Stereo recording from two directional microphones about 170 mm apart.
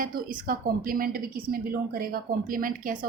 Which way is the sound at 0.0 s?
55° right (ahead or behind).